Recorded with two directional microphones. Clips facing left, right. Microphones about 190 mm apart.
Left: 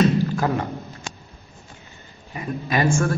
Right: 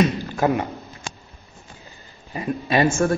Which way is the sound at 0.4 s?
20° right (ahead or behind).